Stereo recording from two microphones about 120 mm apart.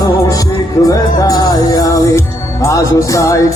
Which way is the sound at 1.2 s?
30° left (ahead or behind).